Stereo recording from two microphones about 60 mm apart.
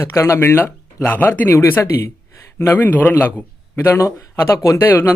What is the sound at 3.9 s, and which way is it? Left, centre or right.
Speech, left.